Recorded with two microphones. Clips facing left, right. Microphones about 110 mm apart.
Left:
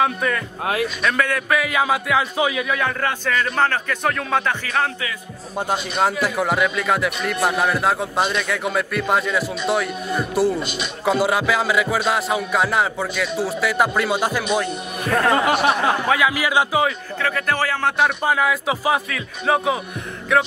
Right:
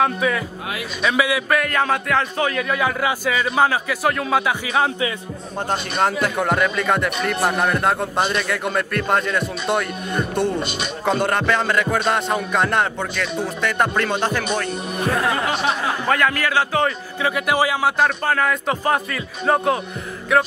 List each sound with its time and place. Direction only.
0.0 s speech: 5° right (ahead or behind)
2.7 s a man's voice: 5° right (ahead or behind)
5.6 s speech: 5° left (ahead or behind)
10.6 s speech: 55° right (ahead or behind)
11.1 s speech: 5° left (ahead or behind)
17.2 s a man's voice: 15° right (ahead or behind)
18.0 s speech: 10° left (ahead or behind)